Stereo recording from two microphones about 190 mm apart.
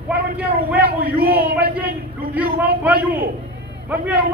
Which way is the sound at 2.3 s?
10° right (ahead or behind).